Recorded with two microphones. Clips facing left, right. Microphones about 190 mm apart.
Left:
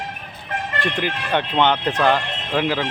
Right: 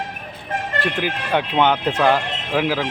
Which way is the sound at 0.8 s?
5° right (ahead or behind).